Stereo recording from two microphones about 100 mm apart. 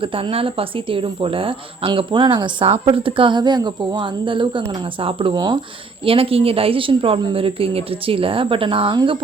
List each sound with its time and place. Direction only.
0.0 s a woman's voice: 65° right (ahead or behind)
2.1 s a woman's voice: 45° right (ahead or behind)
6.1 s speech: 70° right (ahead or behind); by 9.1 s 55° right (ahead or behind)